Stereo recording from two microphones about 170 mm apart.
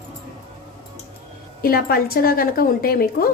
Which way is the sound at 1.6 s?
60° left (ahead or behind).